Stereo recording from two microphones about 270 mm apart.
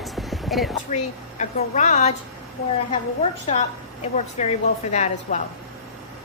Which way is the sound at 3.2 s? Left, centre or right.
Left.